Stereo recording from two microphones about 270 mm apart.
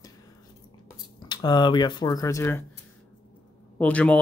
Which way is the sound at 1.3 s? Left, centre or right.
Centre.